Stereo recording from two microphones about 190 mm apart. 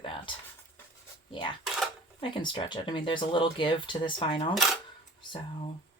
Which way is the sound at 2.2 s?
25° left (ahead or behind).